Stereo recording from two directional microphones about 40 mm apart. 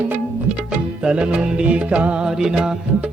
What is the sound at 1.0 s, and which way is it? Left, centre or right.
Music, right.